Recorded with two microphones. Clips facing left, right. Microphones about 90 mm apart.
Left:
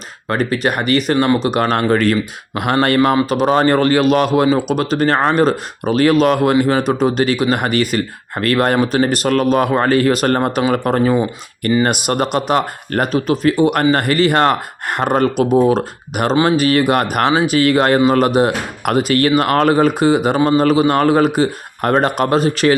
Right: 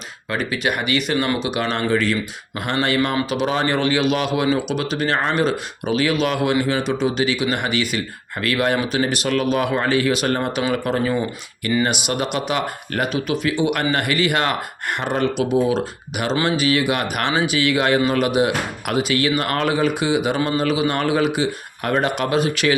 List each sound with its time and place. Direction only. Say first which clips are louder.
0.3 s speech: left 5 dB; 40° left (ahead or behind)
11.8 s speech: left 4 dB; 45° left (ahead or behind)